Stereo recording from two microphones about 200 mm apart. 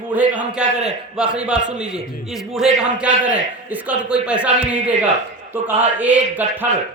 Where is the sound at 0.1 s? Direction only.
5° right (ahead or behind).